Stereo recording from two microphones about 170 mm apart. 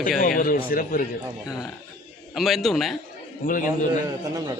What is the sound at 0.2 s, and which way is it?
Speech, 55° left (ahead or behind).